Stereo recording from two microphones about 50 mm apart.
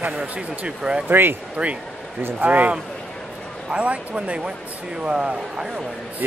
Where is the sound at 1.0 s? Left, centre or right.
Right.